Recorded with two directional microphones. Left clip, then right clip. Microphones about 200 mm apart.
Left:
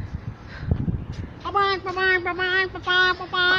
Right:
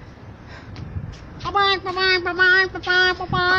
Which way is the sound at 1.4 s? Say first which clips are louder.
Right 3 dB; 10° right (ahead or behind).